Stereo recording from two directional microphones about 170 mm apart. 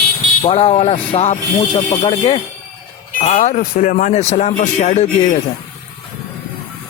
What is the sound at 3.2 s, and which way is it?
Speech, 45° left (ahead or behind).